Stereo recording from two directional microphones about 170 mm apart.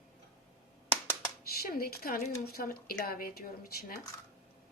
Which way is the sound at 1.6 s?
60° left (ahead or behind).